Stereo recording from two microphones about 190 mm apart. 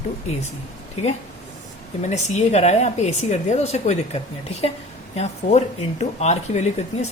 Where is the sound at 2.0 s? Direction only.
35° left (ahead or behind).